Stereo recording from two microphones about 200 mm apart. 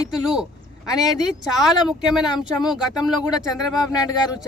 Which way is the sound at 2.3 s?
20° left (ahead or behind).